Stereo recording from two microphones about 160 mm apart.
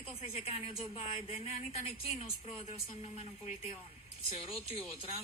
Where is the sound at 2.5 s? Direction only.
40° left (ahead or behind).